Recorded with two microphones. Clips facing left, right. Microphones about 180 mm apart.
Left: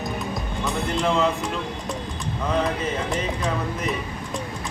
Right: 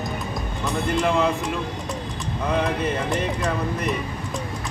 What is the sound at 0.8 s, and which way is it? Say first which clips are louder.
Speech: right 1 dB; centre (ahead or behind).